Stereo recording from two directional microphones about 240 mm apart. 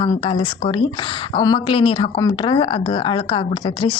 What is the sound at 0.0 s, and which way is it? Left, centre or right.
Speech, left.